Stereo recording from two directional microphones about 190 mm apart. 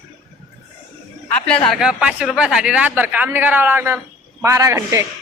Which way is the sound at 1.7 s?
5° right (ahead or behind).